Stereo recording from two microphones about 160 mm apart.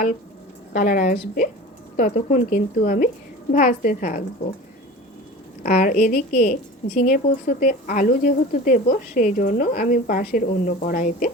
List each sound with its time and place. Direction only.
0.7 s a woman's voice: 60° left (ahead or behind)
5.6 s a woman's voice: 55° left (ahead or behind)